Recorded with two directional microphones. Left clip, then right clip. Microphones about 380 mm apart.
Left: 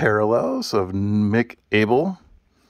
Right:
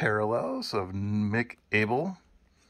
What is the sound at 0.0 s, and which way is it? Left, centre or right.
Speech, centre.